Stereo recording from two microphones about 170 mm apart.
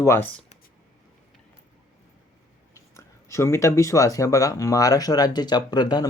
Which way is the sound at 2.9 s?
15° left (ahead or behind).